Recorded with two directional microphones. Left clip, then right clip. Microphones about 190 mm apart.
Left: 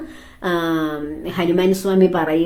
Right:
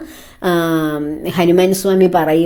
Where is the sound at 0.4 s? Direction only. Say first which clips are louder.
Right 4 dB; 35° right (ahead or behind).